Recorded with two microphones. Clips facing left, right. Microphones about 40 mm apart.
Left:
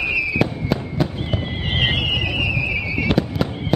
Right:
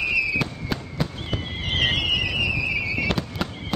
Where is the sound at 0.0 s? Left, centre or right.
Centre.